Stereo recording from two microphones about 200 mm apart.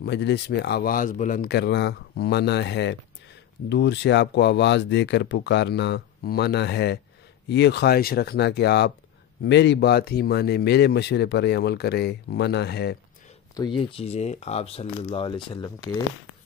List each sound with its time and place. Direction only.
0.0 s a man's voice: 55° left (ahead or behind)
13.6 s speech: 25° left (ahead or behind)